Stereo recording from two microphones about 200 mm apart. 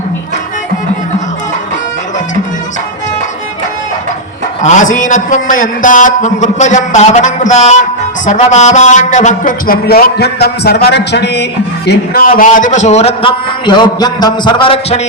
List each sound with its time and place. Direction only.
4.6 s a man's voice: 40° left (ahead or behind)